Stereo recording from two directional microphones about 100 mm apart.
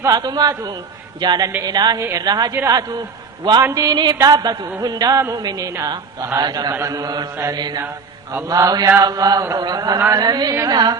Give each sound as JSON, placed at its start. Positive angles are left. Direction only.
{"t": 0.0, "sound": "a man's voice", "side_deg": -40}
{"t": 1.2, "sound": "mantra", "side_deg": -45}
{"t": 2.0, "sound": "a woman's voice", "side_deg": -30}
{"t": 2.2, "sound": "mantra", "side_deg": -40}
{"t": 2.5, "sound": "a man's voice", "side_deg": -30}
{"t": 3.9, "sound": "mantra", "side_deg": -45}
{"t": 4.2, "sound": "a man's voice", "side_deg": -40}
{"t": 7.5, "sound": "mantra", "side_deg": -45}
{"t": 8.4, "sound": "a man's voice", "side_deg": -35}
{"t": 9.6, "sound": "mantra", "side_deg": -45}